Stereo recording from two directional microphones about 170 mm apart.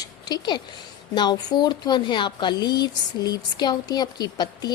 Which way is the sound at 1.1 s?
25° left (ahead or behind).